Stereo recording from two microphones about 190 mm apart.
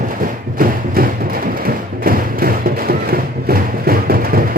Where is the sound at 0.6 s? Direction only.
50° right (ahead or behind).